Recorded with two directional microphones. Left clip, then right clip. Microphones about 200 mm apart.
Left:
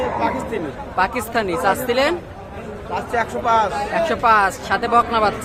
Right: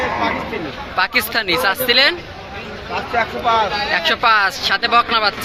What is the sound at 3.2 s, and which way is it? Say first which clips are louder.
Speech: right 1 dB; 20° left (ahead or behind).